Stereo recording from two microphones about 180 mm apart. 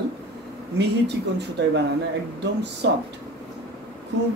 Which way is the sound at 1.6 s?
75° right (ahead or behind).